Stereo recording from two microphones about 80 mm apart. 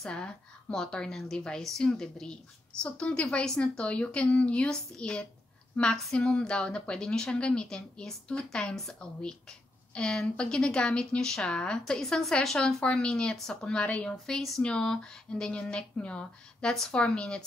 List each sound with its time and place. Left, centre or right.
0.0 s a woman's voice: centre